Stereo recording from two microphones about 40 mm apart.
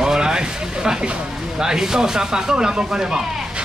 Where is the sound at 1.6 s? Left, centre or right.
Centre.